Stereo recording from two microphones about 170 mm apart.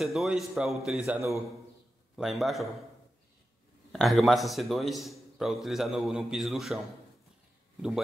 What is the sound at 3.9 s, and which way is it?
A man's voice, centre (ahead or behind).